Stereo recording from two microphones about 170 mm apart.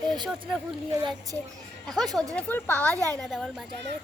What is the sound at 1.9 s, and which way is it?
Speech, centre (ahead or behind).